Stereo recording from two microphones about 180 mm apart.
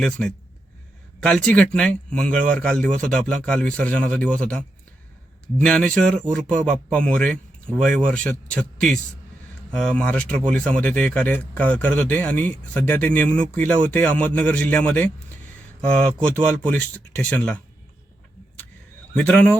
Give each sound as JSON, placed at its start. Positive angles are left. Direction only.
{"t": 0.0, "sound": "a man's voice", "side_deg": 5}
{"t": 5.6, "sound": "a man's voice", "side_deg": 5}
{"t": 10.3, "sound": "speech", "side_deg": -45}
{"t": 10.6, "sound": "speech", "side_deg": 5}
{"t": 16.1, "sound": "speech", "side_deg": 5}
{"t": 19.1, "sound": "speech", "side_deg": 5}